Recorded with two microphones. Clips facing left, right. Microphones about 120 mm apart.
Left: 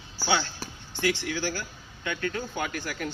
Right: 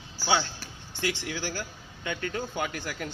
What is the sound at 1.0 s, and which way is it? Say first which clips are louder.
A man's voice: left 4 dB; 20° right (ahead or behind).